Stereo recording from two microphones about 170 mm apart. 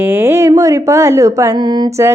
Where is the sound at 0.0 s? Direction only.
10° right (ahead or behind).